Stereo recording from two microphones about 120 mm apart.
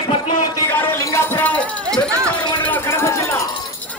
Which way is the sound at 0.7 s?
20° left (ahead or behind).